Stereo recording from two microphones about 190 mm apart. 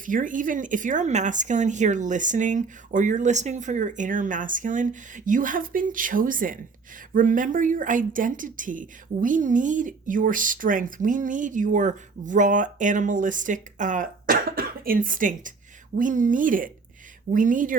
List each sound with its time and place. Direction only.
0.0 s speech: 45° right (ahead or behind)